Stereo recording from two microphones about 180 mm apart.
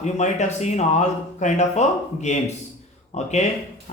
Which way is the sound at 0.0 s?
40° left (ahead or behind).